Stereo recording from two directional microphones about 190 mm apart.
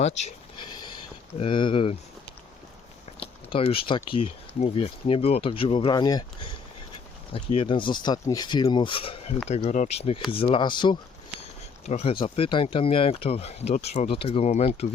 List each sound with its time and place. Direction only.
0.0 s speech: 35° left (ahead or behind)
1.4 s speech: 25° left (ahead or behind)
3.2 s speech: 30° left (ahead or behind)
11.9 s speech: 35° left (ahead or behind)